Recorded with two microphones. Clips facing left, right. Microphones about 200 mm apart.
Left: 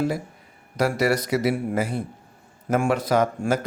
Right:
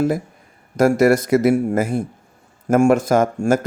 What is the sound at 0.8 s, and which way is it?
A man's voice, 50° right (ahead or behind).